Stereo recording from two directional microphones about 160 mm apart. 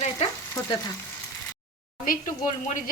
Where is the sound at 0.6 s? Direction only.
20° left (ahead or behind).